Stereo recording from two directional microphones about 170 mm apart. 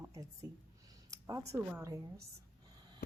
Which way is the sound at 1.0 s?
20° right (ahead or behind).